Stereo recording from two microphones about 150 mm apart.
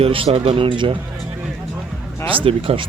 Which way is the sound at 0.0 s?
40° right (ahead or behind).